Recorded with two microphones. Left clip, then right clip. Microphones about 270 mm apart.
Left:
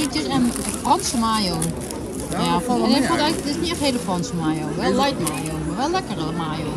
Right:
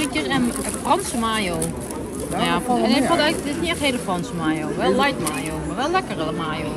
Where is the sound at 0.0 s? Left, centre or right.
Centre.